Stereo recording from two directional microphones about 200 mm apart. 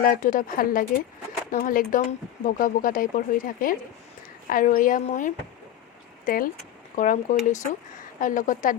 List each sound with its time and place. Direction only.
0.0 s speech: 40° left (ahead or behind)